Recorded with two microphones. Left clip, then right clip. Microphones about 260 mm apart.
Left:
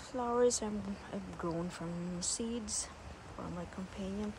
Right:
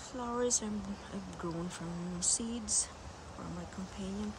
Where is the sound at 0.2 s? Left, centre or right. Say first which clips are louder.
Left 4 dB; centre.